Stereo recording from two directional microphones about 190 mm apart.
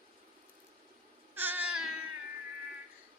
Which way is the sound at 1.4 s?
10° right (ahead or behind).